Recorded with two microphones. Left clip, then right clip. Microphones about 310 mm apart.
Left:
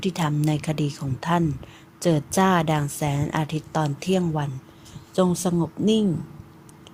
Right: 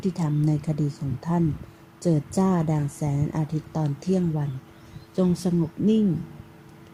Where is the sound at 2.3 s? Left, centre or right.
Left.